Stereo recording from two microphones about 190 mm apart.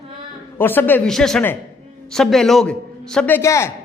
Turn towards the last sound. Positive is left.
turn(degrees=15)  # may be behind; listen again after turning